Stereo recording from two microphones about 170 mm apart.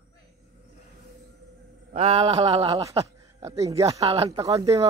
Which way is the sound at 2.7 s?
20° right (ahead or behind).